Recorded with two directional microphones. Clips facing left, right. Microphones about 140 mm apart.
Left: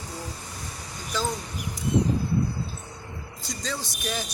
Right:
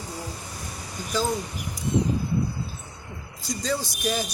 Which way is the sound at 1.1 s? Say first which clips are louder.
Right 3 dB; 5° right (ahead or behind).